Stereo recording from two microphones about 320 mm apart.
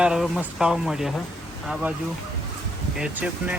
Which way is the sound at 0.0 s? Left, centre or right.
Centre.